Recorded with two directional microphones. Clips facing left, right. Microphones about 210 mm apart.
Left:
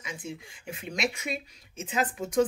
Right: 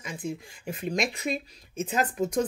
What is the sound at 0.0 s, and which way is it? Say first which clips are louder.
Speech: right 4 dB; 40° right (ahead or behind).